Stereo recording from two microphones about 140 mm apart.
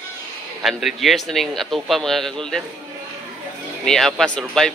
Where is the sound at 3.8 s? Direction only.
5° left (ahead or behind).